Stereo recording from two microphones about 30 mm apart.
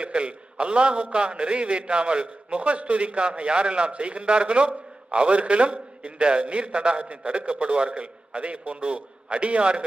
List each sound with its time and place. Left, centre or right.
0.0 s a man's voice: right